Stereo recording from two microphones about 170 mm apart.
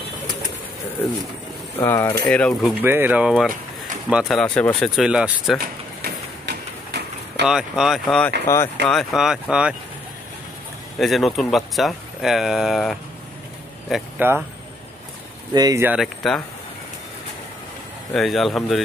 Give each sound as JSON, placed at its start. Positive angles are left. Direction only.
{"t": 1.9, "sound": "speech", "side_deg": 15}
{"t": 2.8, "sound": "speech", "side_deg": -10}
{"t": 5.6, "sound": "a sound", "side_deg": -70}
{"t": 7.4, "sound": "speech", "side_deg": 0}
{"t": 8.5, "sound": "speech", "side_deg": 15}
{"t": 8.8, "sound": "speech", "side_deg": 0}
{"t": 11.0, "sound": "speech", "side_deg": 0}
{"t": 15.5, "sound": "speech", "side_deg": -25}
{"t": 15.8, "sound": "speech", "side_deg": -10}
{"t": 16.2, "sound": "speech", "side_deg": 5}
{"t": 18.1, "sound": "speech", "side_deg": 0}